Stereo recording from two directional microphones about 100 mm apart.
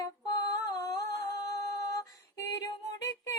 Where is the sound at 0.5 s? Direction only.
35° left (ahead or behind).